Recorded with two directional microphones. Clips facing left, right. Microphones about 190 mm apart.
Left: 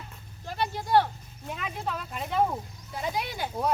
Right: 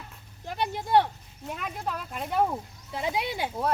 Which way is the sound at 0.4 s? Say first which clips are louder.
Even; 20° right (ahead or behind).